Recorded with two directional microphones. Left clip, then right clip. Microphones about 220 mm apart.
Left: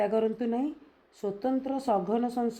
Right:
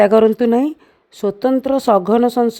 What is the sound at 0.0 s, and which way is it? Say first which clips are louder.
Speech: right 16 dB; 50° right (ahead or behind).